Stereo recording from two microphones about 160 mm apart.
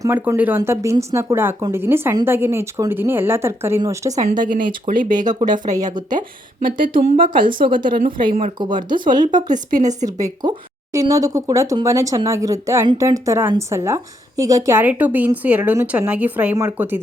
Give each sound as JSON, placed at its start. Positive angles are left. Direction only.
{"t": 0.0, "sound": "speech", "side_deg": -15}
{"t": 4.1, "sound": "a woman's voice", "side_deg": -50}
{"t": 5.5, "sound": "speech", "side_deg": -25}
{"t": 7.3, "sound": "speech", "side_deg": -30}
{"t": 9.3, "sound": "a woman's voice", "side_deg": -50}
{"t": 10.9, "sound": "speech", "side_deg": -20}